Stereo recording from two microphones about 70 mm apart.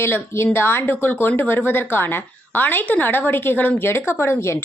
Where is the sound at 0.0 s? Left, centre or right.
Left.